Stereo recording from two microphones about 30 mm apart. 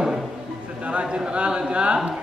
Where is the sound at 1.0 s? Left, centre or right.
Right.